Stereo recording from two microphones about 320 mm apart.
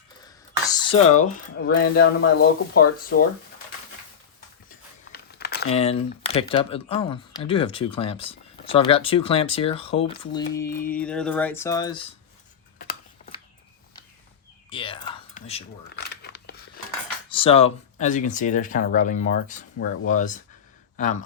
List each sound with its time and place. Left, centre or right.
0.3 s speech: centre; by 3.2 s left
5.1 s crumpling: left
5.7 s speech: centre
12.8 s tick-tock: left
14.7 s a sound: centre
16.0 s scissors: left
17.2 s cutlery: centre
17.9 s speech: left